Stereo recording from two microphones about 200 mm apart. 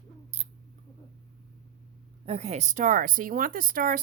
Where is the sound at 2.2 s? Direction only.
30° right (ahead or behind).